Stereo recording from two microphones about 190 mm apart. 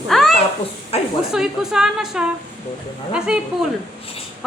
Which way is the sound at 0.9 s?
30° left (ahead or behind).